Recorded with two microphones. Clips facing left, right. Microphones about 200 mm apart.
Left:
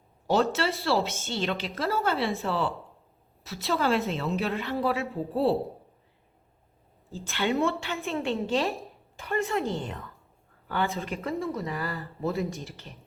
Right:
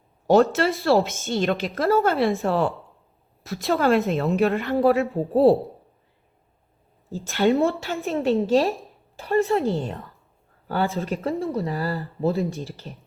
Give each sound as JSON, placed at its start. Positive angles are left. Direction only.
{"t": 0.3, "sound": "a woman's voice", "side_deg": -50}
{"t": 7.5, "sound": "speech", "side_deg": -35}